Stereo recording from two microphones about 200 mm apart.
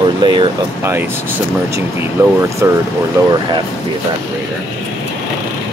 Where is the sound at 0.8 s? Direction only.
10° right (ahead or behind).